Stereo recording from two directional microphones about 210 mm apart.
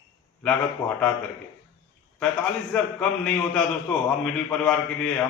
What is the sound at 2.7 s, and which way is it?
A man's voice, 5° left (ahead or behind).